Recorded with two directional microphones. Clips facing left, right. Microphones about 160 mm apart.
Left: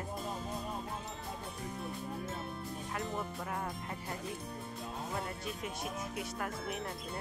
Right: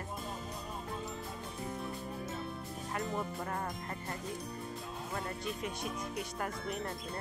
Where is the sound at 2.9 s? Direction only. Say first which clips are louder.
Right 3 dB; 5° left (ahead or behind).